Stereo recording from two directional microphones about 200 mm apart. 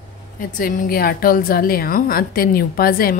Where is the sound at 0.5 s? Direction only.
45° left (ahead or behind).